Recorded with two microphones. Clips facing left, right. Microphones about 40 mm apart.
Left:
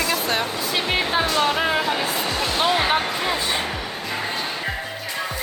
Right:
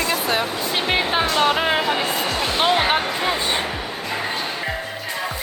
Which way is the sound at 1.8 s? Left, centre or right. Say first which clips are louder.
Right 1 dB; centre.